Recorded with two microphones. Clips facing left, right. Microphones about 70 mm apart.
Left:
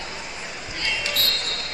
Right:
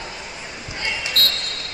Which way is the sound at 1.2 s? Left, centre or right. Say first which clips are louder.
Right 4 dB; right.